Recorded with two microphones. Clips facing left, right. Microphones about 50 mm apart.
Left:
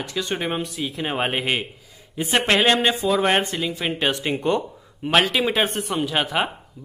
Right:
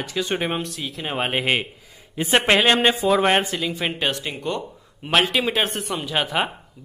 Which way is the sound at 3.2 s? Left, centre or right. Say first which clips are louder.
Right 1 dB; centre.